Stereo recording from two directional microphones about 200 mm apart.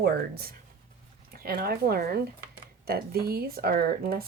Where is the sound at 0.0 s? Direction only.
50° right (ahead or behind).